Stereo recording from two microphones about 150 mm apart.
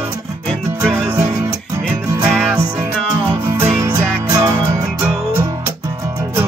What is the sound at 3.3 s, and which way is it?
Music, 15° right (ahead or behind).